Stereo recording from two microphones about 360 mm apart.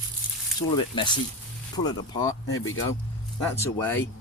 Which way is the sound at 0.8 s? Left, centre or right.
Centre.